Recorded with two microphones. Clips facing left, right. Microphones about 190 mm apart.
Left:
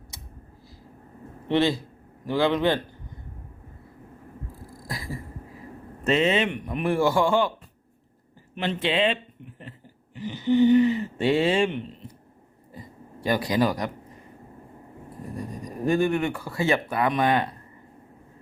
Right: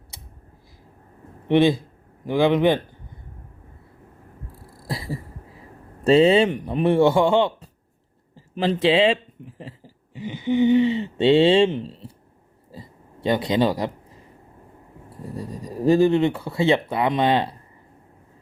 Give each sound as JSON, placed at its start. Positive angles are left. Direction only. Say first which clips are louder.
{"t": 1.5, "sound": "speech", "louder": "right 5 dB", "side_deg": -15}
{"t": 4.8, "sound": "cough", "louder": "right 5 dB", "side_deg": -30}
{"t": 6.1, "sound": "speech", "louder": "right 7 dB", "side_deg": -35}
{"t": 8.5, "sound": "speech", "louder": "right 6 dB", "side_deg": -30}
{"t": 10.2, "sound": "speech", "louder": "even", "side_deg": -15}
{"t": 13.2, "sound": "speech", "louder": "right 3 dB", "side_deg": -25}
{"t": 15.4, "sound": "speech", "louder": "right 4 dB", "side_deg": -30}